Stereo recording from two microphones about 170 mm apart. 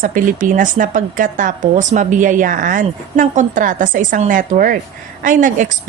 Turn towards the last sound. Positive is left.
turn(degrees=-50)  # may be behind; listen again after turning